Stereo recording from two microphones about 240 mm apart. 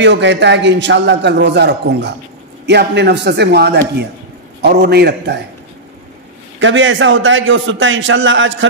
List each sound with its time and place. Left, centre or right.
0.0 s a man's voice: right
6.6 s a man's voice: right